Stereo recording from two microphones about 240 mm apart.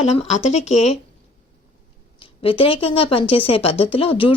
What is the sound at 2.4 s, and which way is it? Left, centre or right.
Speech, left.